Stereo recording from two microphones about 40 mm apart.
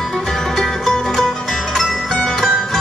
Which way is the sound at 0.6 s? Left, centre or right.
Centre.